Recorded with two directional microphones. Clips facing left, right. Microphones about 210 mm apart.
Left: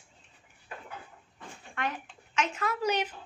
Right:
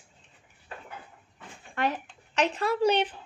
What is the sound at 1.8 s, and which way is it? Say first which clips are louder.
Speech: right 6 dB; 35° right (ahead or behind).